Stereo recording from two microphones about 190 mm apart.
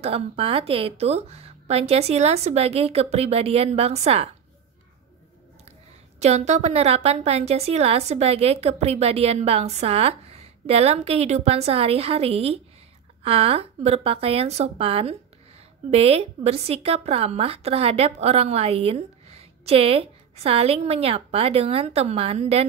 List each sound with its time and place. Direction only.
0.0 s a woman's voice: 30° right (ahead or behind)
5.7 s a woman's voice: 35° right (ahead or behind)